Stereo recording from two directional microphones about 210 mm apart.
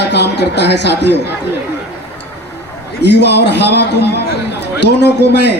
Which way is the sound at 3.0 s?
55° left (ahead or behind).